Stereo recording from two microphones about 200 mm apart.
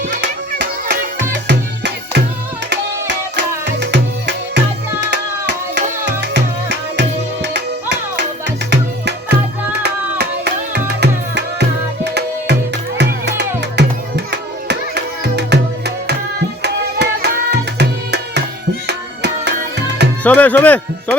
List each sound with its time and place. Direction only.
1.5 s music: 60° right (ahead or behind)
3.8 s music: 60° right (ahead or behind)
7.4 s music: 60° right (ahead or behind)
17.5 s tabla: 55° right (ahead or behind)
18.9 s music: 55° right (ahead or behind)
20.2 s speech: 10° left (ahead or behind)